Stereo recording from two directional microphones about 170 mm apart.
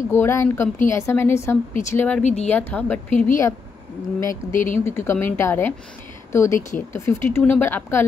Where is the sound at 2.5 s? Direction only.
10° left (ahead or behind).